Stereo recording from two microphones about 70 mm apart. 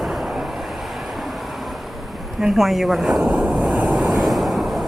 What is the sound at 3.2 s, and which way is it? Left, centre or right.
Speech, centre.